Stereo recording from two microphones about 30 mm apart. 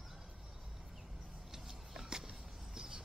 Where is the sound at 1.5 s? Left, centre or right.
Centre.